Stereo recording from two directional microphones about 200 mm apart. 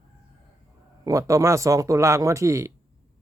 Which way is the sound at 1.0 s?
15° right (ahead or behind).